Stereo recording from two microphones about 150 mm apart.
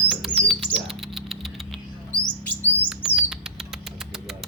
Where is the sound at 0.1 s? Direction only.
Centre (ahead or behind).